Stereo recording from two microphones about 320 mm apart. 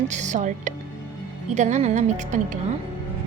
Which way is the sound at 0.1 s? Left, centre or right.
Right.